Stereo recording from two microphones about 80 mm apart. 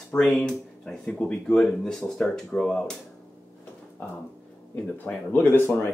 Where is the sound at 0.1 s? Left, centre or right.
Centre.